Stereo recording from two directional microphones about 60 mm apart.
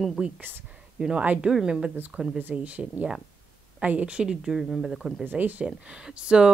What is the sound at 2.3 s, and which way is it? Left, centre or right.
Speech, right.